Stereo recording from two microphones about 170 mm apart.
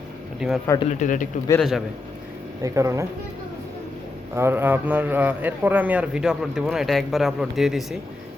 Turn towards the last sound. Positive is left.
turn(degrees=0)  # may be behind; listen again after turning